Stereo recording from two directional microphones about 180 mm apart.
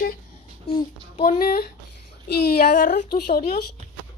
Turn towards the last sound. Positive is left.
turn(degrees=55)  # may be behind; listen again after turning